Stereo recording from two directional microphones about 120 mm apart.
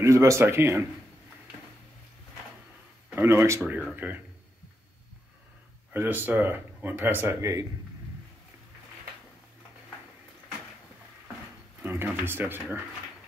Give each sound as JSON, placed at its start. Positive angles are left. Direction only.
{"t": 0.0, "sound": "speech", "side_deg": -25}
{"t": 3.2, "sound": "speech", "side_deg": -20}
{"t": 5.9, "sound": "speech", "side_deg": -15}
{"t": 11.8, "sound": "speech", "side_deg": -15}